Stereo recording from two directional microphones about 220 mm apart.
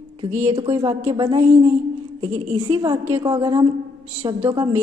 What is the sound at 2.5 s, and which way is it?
A woman's voice, 20° right (ahead or behind).